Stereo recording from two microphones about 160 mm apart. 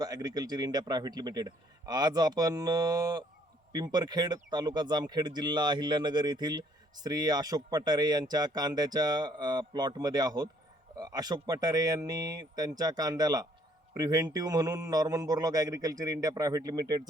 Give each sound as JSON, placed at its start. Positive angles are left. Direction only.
{"t": 0.0, "sound": "a man's voice", "side_deg": -25}